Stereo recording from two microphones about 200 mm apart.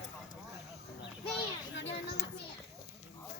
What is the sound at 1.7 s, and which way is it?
Speech, 65° left (ahead or behind).